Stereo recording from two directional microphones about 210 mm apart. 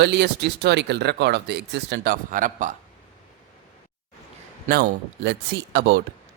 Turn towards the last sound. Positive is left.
turn(degrees=-50)  # may be behind; listen again after turning